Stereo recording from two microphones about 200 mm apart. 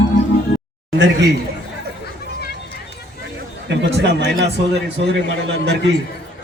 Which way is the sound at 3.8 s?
60° right (ahead or behind).